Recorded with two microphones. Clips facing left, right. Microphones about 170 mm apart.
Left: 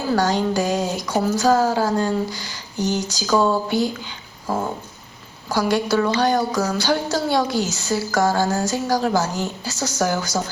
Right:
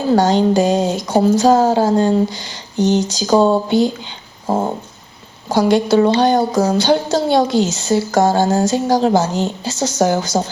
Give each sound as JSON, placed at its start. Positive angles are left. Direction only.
{"t": 0.1, "sound": "speech", "side_deg": -25}
{"t": 4.4, "sound": "a sound", "side_deg": -25}
{"t": 5.5, "sound": "speech", "side_deg": -25}